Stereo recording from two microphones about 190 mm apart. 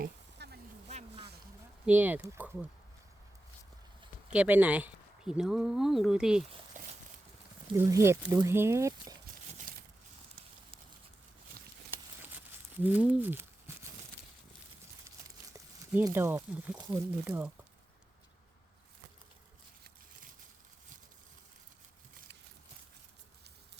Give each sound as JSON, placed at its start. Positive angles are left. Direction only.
{"t": 0.0, "sound": "a sound", "side_deg": -55}
{"t": 0.9, "sound": "boat", "side_deg": -35}
{"t": 1.9, "sound": "speech", "side_deg": -10}
{"t": 4.3, "sound": "speech", "side_deg": -10}
{"t": 6.8, "sound": "a sound", "side_deg": -40}
{"t": 7.8, "sound": "speech", "side_deg": -15}
{"t": 12.2, "sound": "crumpling", "side_deg": -10}
{"t": 15.5, "sound": "speech", "side_deg": -15}